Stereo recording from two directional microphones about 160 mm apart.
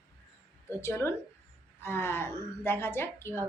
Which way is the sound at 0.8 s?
15° left (ahead or behind).